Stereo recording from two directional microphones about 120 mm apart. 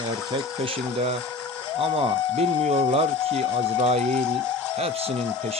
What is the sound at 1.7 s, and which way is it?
Speech, 50° right (ahead or behind).